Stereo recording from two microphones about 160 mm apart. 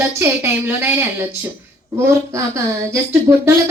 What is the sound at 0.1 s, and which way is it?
A woman's voice, 15° right (ahead or behind).